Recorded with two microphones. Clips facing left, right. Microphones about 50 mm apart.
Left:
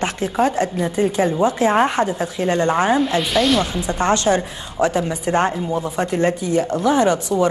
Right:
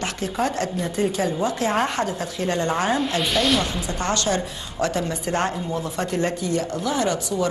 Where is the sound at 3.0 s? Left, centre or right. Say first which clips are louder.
Left 4 dB; centre.